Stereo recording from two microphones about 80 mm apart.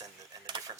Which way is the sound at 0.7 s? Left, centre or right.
Right.